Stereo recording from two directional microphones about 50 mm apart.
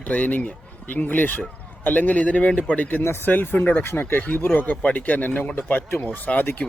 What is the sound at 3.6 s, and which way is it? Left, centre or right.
Speech, left.